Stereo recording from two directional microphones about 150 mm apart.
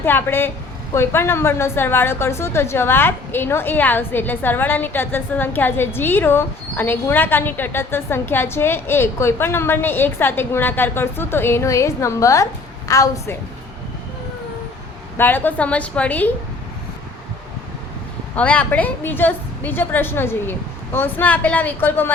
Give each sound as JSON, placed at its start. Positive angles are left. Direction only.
{"t": 0.0, "sound": "a woman's voice", "side_deg": 15}
{"t": 15.2, "sound": "a woman's voice", "side_deg": 15}
{"t": 18.3, "sound": "a woman's voice", "side_deg": 10}